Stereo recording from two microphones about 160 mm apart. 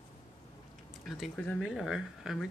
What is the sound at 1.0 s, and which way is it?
Speech, 5° left (ahead or behind).